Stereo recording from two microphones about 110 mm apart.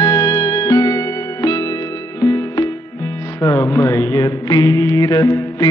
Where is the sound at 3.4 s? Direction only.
30° left (ahead or behind).